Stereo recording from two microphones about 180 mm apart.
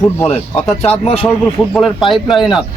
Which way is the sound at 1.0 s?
30° left (ahead or behind).